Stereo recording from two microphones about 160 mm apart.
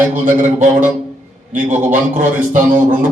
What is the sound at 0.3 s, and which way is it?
Speech, 50° right (ahead or behind).